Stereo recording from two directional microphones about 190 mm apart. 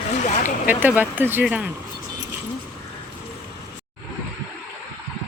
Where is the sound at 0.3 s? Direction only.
40° left (ahead or behind).